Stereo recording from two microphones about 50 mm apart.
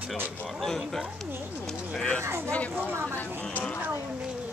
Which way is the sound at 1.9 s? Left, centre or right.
Centre.